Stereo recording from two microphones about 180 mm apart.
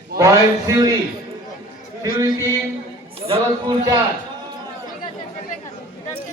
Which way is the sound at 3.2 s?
30° right (ahead or behind).